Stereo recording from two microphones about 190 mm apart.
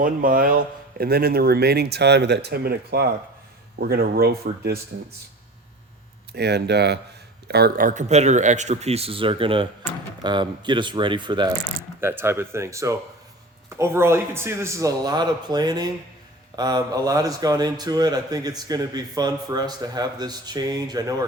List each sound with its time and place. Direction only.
0.0 s speech: 45° right (ahead or behind)
6.3 s a man's voice: 60° right (ahead or behind); by 11.5 s 25° right (ahead or behind)
11.9 s a man's voice: 10° right (ahead or behind)